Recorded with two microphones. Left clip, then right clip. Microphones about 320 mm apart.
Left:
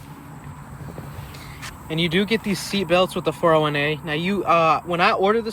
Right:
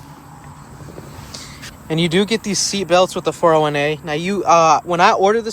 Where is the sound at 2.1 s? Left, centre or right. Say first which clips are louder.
Right 3 dB; centre.